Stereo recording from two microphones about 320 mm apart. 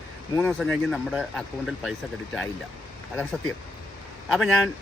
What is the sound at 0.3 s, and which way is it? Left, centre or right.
Speech, centre.